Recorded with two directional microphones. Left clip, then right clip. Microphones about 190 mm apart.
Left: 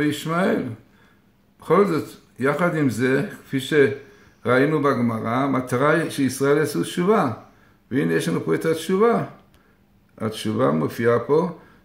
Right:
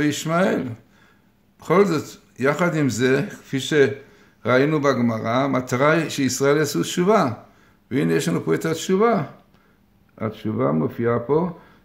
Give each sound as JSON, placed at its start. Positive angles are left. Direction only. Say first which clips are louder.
{"t": 0.0, "sound": "a man's voice", "louder": "right 2 dB", "side_deg": -40}